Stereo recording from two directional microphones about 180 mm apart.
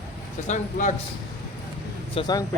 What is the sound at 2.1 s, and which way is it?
Speech, 25° left (ahead or behind).